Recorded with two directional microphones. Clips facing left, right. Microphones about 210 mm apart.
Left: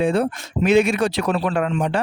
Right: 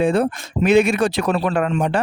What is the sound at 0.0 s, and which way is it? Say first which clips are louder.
Speech: right 2 dB; 55° right (ahead or behind).